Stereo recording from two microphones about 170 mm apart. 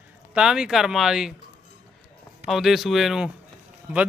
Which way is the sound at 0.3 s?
5° right (ahead or behind).